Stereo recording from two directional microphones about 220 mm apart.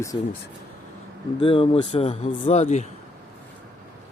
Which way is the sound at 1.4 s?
25° left (ahead or behind).